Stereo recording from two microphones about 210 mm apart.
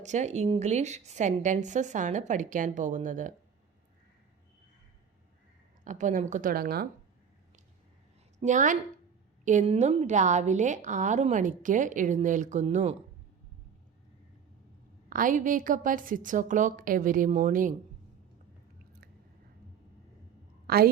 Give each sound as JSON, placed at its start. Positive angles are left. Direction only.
{"t": 0.0, "sound": "a woman's voice", "side_deg": -35}
{"t": 5.8, "sound": "a woman's voice", "side_deg": -35}
{"t": 8.4, "sound": "a woman's voice", "side_deg": -35}
{"t": 15.1, "sound": "a woman's voice", "side_deg": -40}
{"t": 20.7, "sound": "a woman's voice", "side_deg": -45}